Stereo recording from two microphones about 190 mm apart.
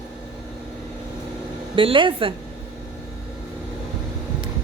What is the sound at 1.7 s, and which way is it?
Speech, 25° right (ahead or behind).